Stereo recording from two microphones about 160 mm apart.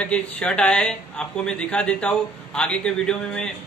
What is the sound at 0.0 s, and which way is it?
A man's voice, 5° left (ahead or behind).